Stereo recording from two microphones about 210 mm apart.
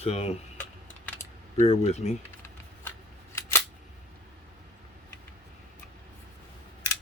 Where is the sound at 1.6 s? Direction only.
30° left (ahead or behind).